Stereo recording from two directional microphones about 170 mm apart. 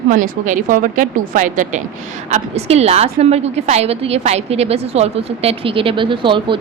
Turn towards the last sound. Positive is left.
turn(degrees=-30)  # may be behind; listen again after turning